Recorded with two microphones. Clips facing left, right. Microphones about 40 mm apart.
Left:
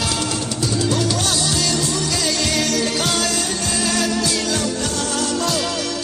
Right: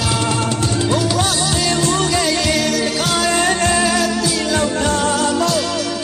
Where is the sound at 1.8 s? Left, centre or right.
Right.